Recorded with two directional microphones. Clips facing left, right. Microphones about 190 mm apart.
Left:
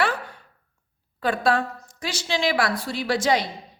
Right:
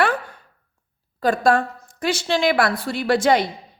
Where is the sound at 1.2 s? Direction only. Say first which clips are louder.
Right 4 dB; 45° right (ahead or behind).